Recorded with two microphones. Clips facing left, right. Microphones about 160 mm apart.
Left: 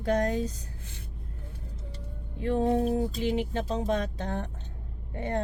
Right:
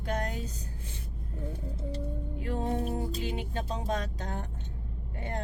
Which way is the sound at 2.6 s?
40° left (ahead or behind).